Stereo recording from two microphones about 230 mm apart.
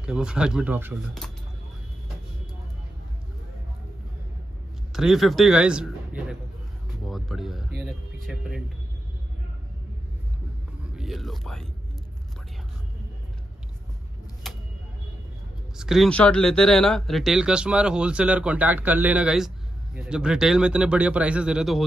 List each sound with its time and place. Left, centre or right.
0.0 s speech: centre
4.9 s speech: centre
11.0 s speech: centre
14.4 s vehicle: centre
15.8 s speech: centre